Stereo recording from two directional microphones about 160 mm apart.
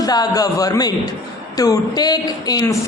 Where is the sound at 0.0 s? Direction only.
25° left (ahead or behind).